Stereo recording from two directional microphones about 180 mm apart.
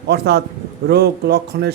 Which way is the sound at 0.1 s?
65° right (ahead or behind).